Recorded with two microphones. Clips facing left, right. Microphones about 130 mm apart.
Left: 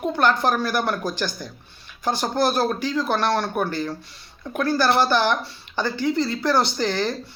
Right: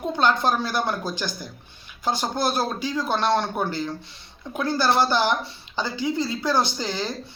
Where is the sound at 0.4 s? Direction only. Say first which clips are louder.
Left 2 dB; 15° right (ahead or behind).